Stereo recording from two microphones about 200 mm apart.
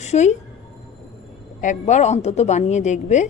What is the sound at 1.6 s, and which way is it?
A woman's voice, 35° left (ahead or behind).